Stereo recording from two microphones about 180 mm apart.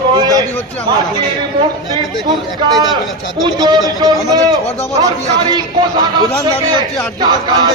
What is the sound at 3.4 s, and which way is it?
A man's voice, 20° right (ahead or behind).